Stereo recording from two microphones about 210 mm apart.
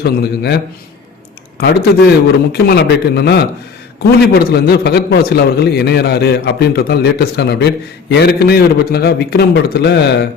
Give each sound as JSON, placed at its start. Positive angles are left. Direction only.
{"t": 0.0, "sound": "a man's voice", "side_deg": 50}
{"t": 1.6, "sound": "a man's voice", "side_deg": 50}